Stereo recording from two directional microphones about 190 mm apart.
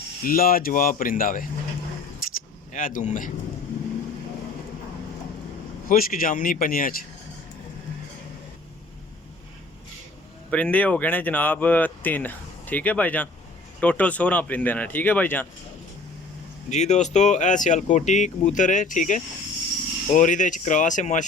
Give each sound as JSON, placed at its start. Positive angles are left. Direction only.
{"t": 0.2, "sound": "speech", "side_deg": 50}
{"t": 2.7, "sound": "speech", "side_deg": 45}
{"t": 5.9, "sound": "speech", "side_deg": 45}
{"t": 10.5, "sound": "speech", "side_deg": 5}
{"t": 16.6, "sound": "speech", "side_deg": 35}